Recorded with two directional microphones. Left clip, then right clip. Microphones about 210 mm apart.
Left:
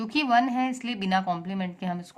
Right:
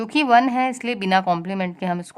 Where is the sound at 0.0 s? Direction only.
30° right (ahead or behind).